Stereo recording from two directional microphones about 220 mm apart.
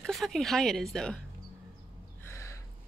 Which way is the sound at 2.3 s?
10° left (ahead or behind).